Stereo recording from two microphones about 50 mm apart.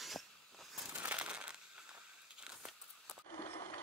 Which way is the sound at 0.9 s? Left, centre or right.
Right.